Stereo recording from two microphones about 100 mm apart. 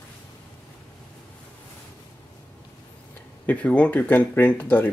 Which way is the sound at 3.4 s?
15° left (ahead or behind).